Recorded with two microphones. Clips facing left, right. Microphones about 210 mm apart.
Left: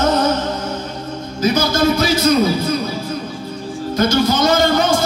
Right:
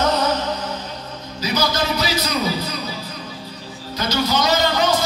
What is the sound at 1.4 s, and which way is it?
Music, 50° left (ahead or behind).